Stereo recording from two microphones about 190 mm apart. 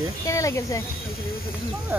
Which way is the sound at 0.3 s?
15° left (ahead or behind).